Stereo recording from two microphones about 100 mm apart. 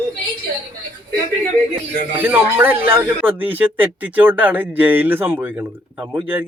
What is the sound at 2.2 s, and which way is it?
Speech, 20° right (ahead or behind).